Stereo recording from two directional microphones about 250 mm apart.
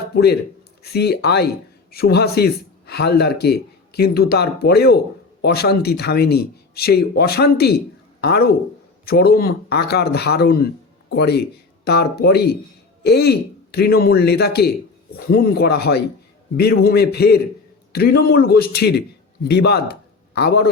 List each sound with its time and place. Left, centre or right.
0.8 s a man's voice: left